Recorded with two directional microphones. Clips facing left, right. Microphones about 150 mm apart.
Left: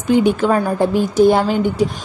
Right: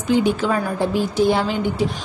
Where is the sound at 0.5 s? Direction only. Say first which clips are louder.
Left 5 dB; 40° left (ahead or behind).